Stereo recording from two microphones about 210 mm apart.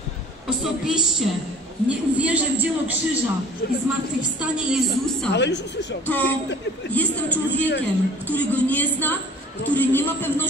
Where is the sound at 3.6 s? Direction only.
50° left (ahead or behind).